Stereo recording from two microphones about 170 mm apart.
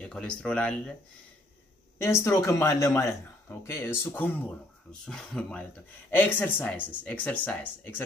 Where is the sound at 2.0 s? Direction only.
15° left (ahead or behind).